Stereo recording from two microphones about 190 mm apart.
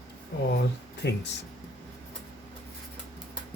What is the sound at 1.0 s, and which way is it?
Speech, 65° left (ahead or behind).